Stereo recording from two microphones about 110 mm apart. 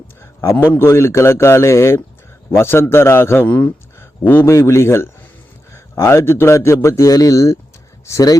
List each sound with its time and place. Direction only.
0.5 s a man's voice: 15° left (ahead or behind)